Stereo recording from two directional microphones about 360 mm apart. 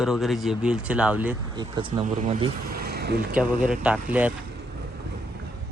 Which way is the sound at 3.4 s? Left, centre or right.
Centre.